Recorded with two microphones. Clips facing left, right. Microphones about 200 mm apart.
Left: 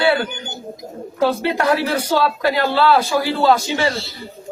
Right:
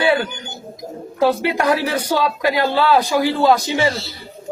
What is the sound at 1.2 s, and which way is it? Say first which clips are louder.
A man's voice: right 1 dB; 15° right (ahead or behind).